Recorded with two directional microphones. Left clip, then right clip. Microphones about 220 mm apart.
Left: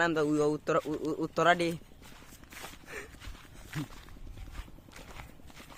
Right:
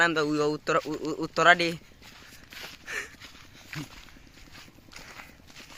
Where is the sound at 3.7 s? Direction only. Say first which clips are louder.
Right 2 dB; 15° left (ahead or behind).